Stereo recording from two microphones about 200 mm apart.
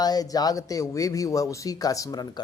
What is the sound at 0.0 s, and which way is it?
A man's voice, 20° left (ahead or behind).